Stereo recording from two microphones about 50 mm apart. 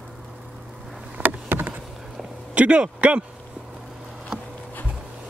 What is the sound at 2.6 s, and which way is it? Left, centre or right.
Speech, right.